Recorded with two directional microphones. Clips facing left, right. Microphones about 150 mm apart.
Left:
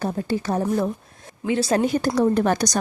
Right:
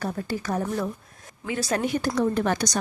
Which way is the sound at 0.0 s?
25° left (ahead or behind).